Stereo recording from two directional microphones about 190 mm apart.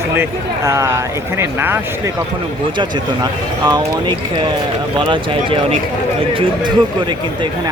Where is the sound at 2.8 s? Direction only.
20° right (ahead or behind).